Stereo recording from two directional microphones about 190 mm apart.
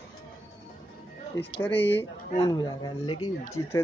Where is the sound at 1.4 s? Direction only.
10° left (ahead or behind).